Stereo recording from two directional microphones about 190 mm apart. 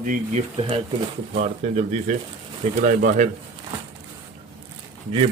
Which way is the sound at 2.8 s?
45° right (ahead or behind).